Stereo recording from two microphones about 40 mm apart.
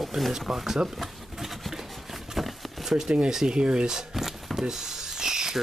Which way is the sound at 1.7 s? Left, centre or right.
Centre.